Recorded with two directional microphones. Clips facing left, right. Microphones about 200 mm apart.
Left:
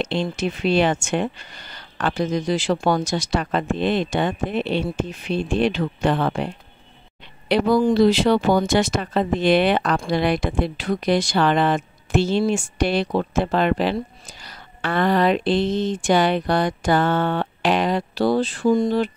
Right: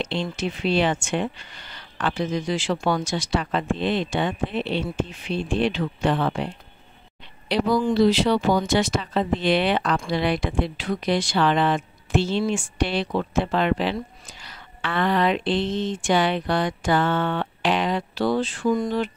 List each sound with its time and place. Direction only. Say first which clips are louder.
0.0 s speech: left 3 dB; 45° left (ahead or behind)